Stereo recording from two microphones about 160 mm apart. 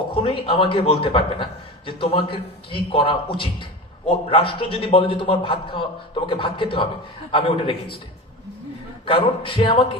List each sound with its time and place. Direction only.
0.1 s a man's voice: 35° left (ahead or behind)
9.0 s a man's voice: 35° left (ahead or behind)